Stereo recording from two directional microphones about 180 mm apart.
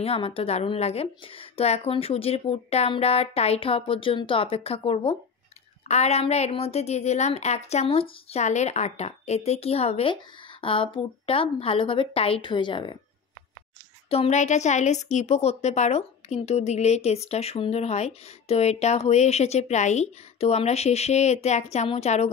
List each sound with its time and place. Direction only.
0.0 s a woman's voice: 30° left (ahead or behind)
14.1 s a woman's voice: 35° left (ahead or behind)